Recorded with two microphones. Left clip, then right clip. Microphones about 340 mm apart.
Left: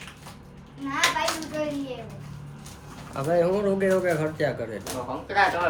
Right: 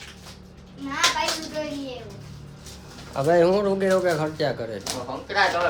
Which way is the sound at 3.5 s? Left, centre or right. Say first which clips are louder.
Right 2 dB; centre.